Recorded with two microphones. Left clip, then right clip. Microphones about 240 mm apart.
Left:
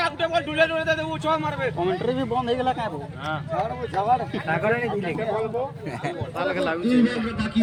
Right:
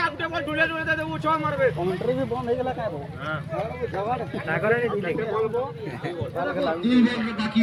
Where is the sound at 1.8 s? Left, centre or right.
Left.